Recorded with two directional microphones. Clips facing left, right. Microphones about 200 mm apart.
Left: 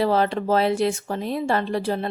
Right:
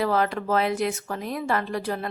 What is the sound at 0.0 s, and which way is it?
Speech, 30° left (ahead or behind).